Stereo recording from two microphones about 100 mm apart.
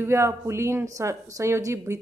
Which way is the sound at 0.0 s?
25° right (ahead or behind).